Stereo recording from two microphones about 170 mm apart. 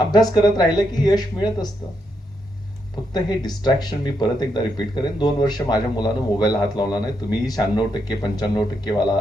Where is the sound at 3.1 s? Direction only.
25° left (ahead or behind).